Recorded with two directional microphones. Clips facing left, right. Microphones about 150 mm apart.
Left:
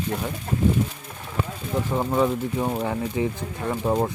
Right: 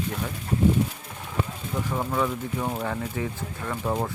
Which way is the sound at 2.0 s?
25° left (ahead or behind).